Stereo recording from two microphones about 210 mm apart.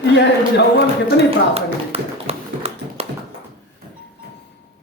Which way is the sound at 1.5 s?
30° right (ahead or behind).